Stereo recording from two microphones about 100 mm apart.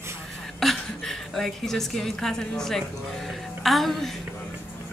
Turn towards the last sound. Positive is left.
turn(degrees=0)  # may be behind; listen again after turning